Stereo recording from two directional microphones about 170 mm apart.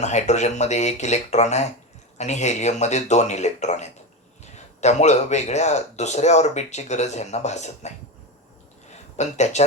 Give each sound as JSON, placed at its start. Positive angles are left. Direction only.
{"t": 0.0, "sound": "speech", "side_deg": 40}
{"t": 9.1, "sound": "speech", "side_deg": 40}